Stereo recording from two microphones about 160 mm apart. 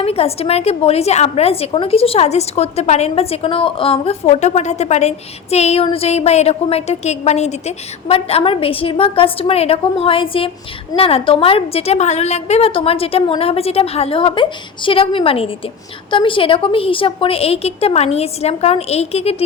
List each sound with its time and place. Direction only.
0.0 s a woman's voice: 40° left (ahead or behind)